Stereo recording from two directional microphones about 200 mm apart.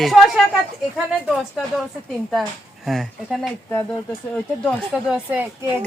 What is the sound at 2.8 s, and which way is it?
Speech, centre (ahead or behind).